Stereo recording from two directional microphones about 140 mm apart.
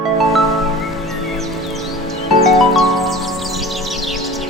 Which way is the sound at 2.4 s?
Centre (ahead or behind).